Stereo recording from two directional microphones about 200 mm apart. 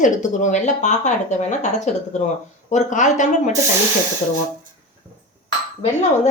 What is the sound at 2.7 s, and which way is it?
Speech, 40° left (ahead or behind).